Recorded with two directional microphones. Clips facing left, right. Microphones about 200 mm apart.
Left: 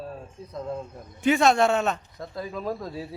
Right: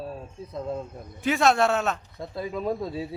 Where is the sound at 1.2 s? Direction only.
Centre (ahead or behind).